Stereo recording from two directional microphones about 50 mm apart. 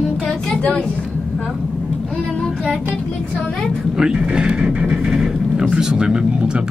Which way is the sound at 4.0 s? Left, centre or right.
Centre.